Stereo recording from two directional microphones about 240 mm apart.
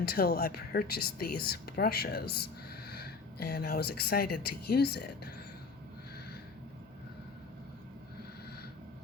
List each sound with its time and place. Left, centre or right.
0.0 s speech: left